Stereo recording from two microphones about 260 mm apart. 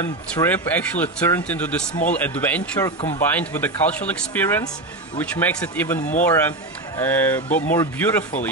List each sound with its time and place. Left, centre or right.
0.0 s speech: centre
5.9 s speech: left
6.2 s speech: centre